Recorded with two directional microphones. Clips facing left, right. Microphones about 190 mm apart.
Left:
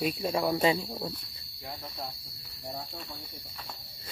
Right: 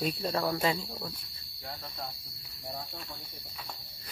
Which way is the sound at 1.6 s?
10° left (ahead or behind).